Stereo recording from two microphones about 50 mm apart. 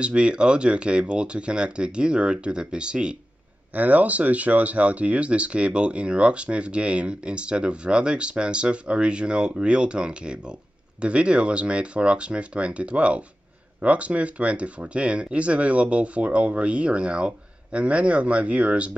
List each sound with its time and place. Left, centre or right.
0.0 s speech: right
3.7 s speech: right